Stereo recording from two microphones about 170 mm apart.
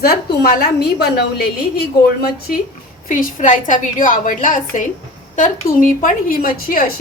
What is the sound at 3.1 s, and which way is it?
A woman's voice, 50° left (ahead or behind).